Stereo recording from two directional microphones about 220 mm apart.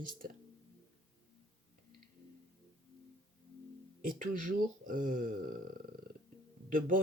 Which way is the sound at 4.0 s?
40° right (ahead or behind).